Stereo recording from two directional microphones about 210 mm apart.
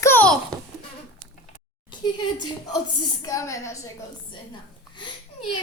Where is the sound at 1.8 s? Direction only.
20° left (ahead or behind).